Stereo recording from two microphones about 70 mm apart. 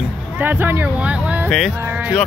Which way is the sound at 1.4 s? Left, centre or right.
Centre.